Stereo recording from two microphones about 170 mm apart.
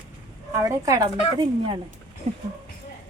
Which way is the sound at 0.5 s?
20° right (ahead or behind).